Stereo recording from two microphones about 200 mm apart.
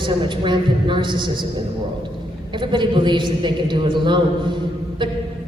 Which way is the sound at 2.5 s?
25° right (ahead or behind).